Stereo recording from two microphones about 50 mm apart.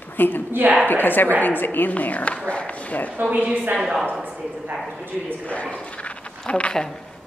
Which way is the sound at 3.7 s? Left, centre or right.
Centre.